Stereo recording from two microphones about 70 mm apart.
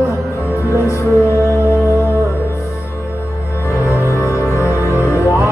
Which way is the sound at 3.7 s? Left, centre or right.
Left.